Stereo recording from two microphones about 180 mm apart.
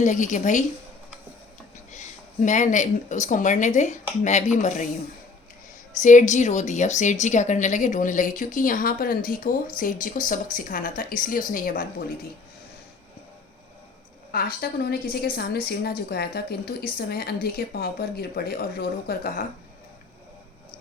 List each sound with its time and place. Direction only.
0.0 s a woman's voice: 45° left (ahead or behind)
1.9 s a woman's voice: 40° left (ahead or behind)
6.0 s a woman's voice: 45° left (ahead or behind)
14.3 s a woman's voice: 55° left (ahead or behind)